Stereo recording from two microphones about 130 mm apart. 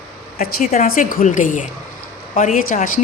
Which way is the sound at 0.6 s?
80° left.